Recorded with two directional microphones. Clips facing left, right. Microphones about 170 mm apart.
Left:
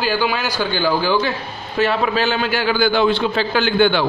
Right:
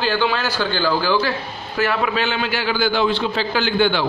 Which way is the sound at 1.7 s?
30° left (ahead or behind).